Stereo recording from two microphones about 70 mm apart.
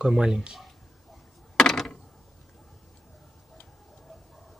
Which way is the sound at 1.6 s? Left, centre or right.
Centre.